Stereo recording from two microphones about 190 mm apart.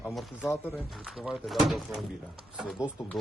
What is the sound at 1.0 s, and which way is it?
Speech, centre (ahead or behind).